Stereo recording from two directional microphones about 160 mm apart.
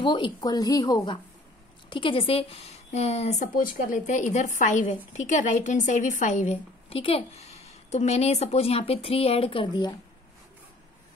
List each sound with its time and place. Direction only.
0.0 s speech: 30° left (ahead or behind)